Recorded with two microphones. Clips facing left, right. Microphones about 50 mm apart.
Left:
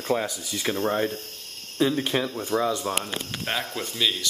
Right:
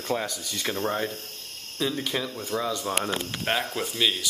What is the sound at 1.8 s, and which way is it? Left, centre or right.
Speech, left.